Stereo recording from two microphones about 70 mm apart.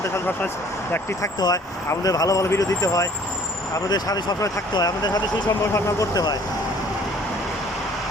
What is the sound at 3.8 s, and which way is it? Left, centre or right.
Speech, left.